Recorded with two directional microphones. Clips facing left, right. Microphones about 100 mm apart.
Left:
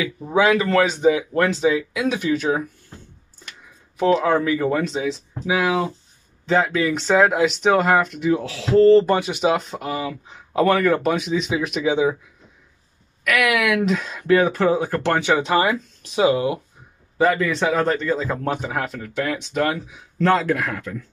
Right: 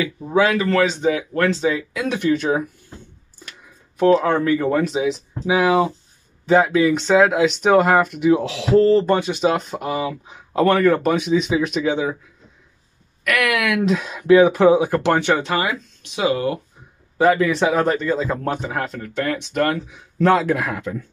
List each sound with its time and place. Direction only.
0.3 s speech: 20° left (ahead or behind)
1.5 s speech: 5° left (ahead or behind)
4.0 s speech: centre (ahead or behind)
4.9 s speech: 20° right (ahead or behind)
6.4 s speech: 5° right (ahead or behind)
8.4 s speech: 20° right (ahead or behind)
8.7 s speech: centre (ahead or behind)
13.2 s speech: 5° left (ahead or behind); by 15.1 s 15° right (ahead or behind)
15.1 s speech: 5° left (ahead or behind)
16.2 s speech: 25° left (ahead or behind)
17.2 s speech: 5° right (ahead or behind)
20.5 s speech: 15° right (ahead or behind)